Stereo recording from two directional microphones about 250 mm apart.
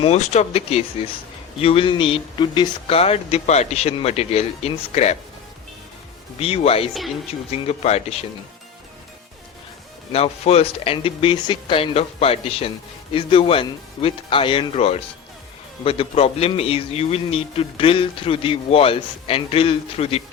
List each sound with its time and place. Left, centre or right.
0.0 s a man's voice: left
6.4 s a man's voice: left
10.1 s a man's voice: left